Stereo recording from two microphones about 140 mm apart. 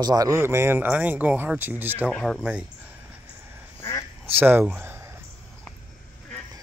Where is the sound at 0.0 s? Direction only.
25° right (ahead or behind).